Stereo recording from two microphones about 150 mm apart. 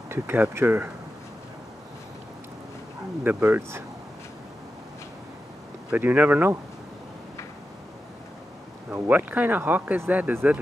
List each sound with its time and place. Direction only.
0.1 s speech: 15° right (ahead or behind)
3.3 s speech: 15° right (ahead or behind)
5.9 s speech: 10° right (ahead or behind)
8.9 s speech: 15° right (ahead or behind)